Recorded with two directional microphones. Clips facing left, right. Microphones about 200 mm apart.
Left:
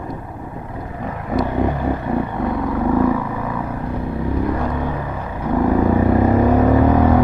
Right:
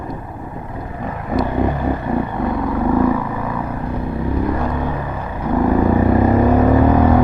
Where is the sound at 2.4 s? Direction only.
25° right (ahead or behind).